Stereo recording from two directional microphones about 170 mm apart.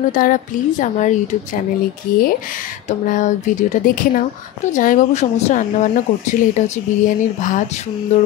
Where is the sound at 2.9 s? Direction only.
45° left (ahead or behind).